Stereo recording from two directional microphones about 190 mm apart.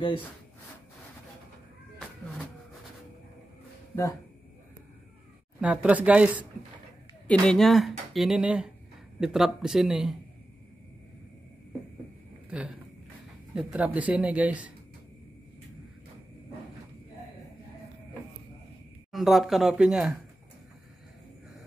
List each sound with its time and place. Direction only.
3.9 s speech: 15° left (ahead or behind)
5.6 s speech: 5° right (ahead or behind)
7.2 s speech: 5° left (ahead or behind)
12.4 s speech: 5° right (ahead or behind)
19.1 s speech: centre (ahead or behind)